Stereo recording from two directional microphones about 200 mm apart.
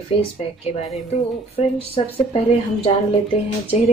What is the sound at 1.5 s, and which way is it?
Speech, 30° left (ahead or behind).